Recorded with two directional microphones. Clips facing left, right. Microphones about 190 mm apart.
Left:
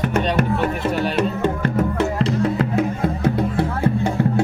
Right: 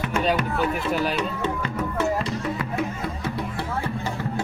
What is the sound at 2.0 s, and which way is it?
Music, 85° left.